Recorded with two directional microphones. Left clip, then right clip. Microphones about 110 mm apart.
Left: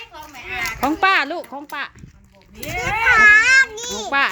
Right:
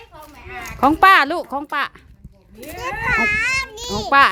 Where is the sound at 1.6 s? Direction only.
65° right (ahead or behind).